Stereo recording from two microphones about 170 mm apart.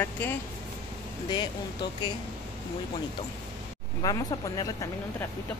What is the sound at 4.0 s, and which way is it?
Speech, 25° left (ahead or behind).